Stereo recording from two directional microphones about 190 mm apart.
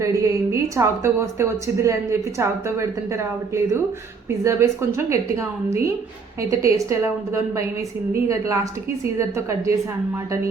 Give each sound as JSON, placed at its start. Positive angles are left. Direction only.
{"t": 0.0, "sound": "a woman's voice", "side_deg": -15}